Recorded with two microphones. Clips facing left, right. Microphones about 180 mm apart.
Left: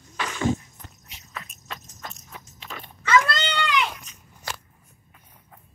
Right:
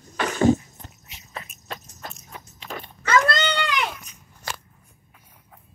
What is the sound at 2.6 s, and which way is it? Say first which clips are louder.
Dog: right 2 dB; 40° right (ahead or behind).